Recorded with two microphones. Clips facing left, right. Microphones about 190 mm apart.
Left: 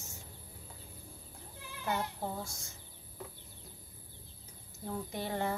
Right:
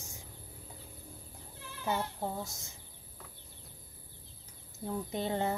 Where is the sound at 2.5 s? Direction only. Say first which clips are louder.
Even; 20° right (ahead or behind).